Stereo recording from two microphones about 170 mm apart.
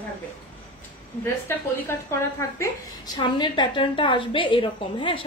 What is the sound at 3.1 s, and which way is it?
A woman's voice, 25° left (ahead or behind).